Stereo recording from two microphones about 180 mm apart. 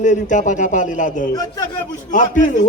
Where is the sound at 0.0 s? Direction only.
45° left (ahead or behind).